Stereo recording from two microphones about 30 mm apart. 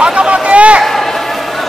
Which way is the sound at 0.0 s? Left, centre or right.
Right.